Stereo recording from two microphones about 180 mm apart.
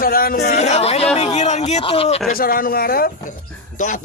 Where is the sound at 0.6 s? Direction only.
35° left (ahead or behind).